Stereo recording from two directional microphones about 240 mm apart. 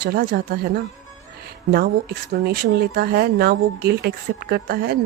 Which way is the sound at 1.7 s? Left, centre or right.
Right.